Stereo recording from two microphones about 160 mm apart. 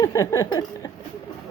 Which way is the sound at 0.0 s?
20° left (ahead or behind).